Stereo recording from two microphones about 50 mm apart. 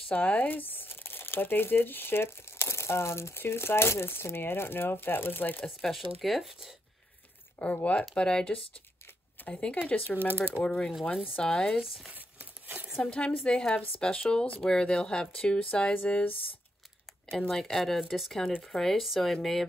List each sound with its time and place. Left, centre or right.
0.1 s speech: left
5.8 s speech: centre
7.5 s speech: left
9.8 s speech: left
10.6 s speech: centre
12.1 s crumpling: right
13.0 s speech: left
17.5 s speech: centre
18.7 s speech: centre